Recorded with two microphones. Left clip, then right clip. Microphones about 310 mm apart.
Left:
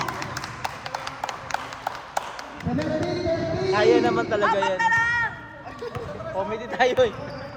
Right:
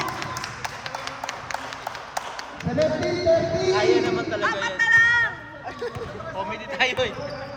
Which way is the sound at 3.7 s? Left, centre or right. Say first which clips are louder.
Left 5 dB; left.